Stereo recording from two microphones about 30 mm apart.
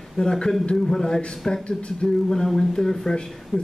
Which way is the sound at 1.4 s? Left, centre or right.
Centre.